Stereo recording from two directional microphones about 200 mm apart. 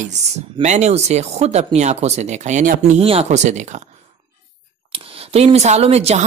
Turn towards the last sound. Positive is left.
turn(degrees=-30)  # may be behind; listen again after turning